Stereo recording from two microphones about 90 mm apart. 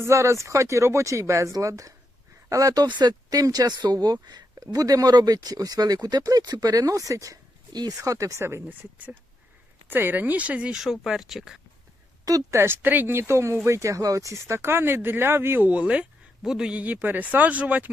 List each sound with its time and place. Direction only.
0.0 s speech: 30° right (ahead or behind); by 11.6 s 5° right (ahead or behind)
12.2 s speech: 40° right (ahead or behind)
12.5 s speech: 25° right (ahead or behind)